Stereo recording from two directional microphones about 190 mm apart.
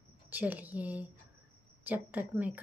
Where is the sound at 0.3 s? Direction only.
10° right (ahead or behind).